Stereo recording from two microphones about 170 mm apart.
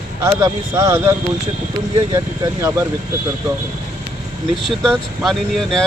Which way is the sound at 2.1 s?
15° right (ahead or behind).